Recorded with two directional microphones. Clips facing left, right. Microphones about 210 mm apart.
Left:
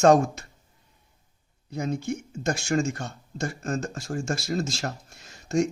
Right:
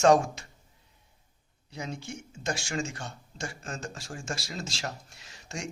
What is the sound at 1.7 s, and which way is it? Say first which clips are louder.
Speech: left 9 dB; 50° left (ahead or behind).